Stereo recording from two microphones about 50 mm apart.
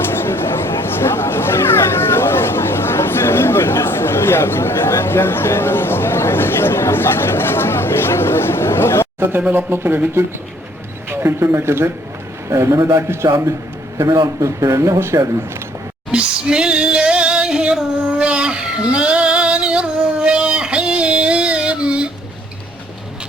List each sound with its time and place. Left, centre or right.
0.0 s a sound: left
9.5 s speech: right
11.1 s speech: right
12.5 s a man's voice: right
14.0 s speech: right
16.1 s female singing: centre